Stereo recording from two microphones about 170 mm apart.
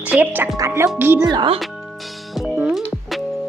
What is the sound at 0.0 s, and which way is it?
A woman's voice, 10° right (ahead or behind).